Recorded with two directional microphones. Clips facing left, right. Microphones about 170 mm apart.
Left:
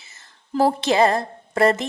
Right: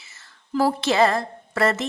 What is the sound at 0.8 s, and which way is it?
A woman's voice, 20° left (ahead or behind).